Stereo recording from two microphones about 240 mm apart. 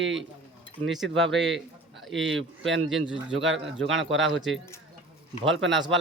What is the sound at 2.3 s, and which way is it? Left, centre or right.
Speech, right.